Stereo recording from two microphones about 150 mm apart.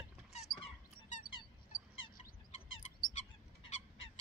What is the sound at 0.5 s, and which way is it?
Dog, 70° left (ahead or behind).